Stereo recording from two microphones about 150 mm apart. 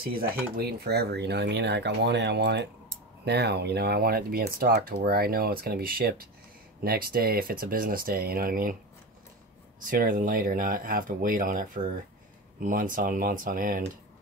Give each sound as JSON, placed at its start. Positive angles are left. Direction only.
{"t": 0.2, "sound": "speech", "side_deg": -90}
{"t": 9.8, "sound": "speech", "side_deg": -65}